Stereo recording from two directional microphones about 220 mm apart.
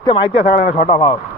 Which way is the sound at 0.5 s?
40° left (ahead or behind).